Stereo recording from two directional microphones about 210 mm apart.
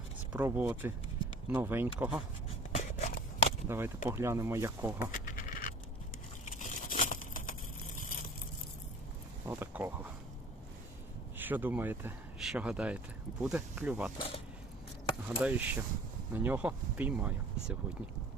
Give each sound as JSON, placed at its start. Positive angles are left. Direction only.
{"t": 0.3, "sound": "speech", "side_deg": -10}
{"t": 2.7, "sound": "scissors", "side_deg": 30}
{"t": 3.7, "sound": "speech", "side_deg": -10}
{"t": 5.1, "sound": "a sound", "side_deg": 40}
{"t": 9.5, "sound": "speech", "side_deg": -10}
{"t": 11.3, "sound": "speech", "side_deg": -10}
{"t": 14.2, "sound": "speech", "side_deg": 25}
{"t": 15.4, "sound": "speech", "side_deg": -5}